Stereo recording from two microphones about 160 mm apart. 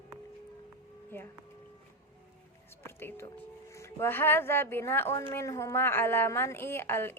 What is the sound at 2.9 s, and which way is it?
A woman's voice, 15° left (ahead or behind).